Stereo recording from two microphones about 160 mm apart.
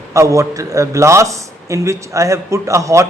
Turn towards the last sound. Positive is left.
turn(degrees=-20)  # may be behind; listen again after turning